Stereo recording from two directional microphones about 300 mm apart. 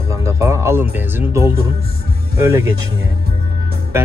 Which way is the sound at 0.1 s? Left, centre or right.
Centre.